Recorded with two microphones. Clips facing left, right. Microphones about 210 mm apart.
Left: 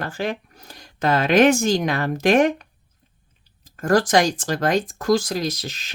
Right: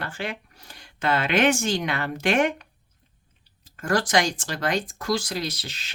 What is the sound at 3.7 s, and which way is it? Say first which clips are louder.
Speech: left 5 dB; 40° left (ahead or behind).